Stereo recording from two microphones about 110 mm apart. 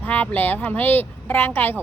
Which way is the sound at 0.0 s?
15° left (ahead or behind).